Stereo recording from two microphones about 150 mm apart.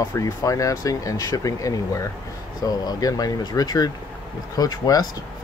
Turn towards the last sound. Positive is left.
turn(degrees=25)  # may be behind; listen again after turning